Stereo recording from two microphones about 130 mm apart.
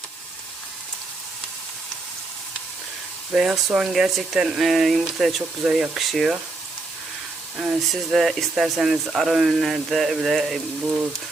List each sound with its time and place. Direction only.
3.3 s speech: 5° right (ahead or behind)
7.6 s speech: centre (ahead or behind)